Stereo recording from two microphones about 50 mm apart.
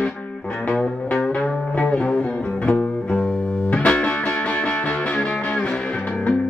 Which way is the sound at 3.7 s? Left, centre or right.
Left.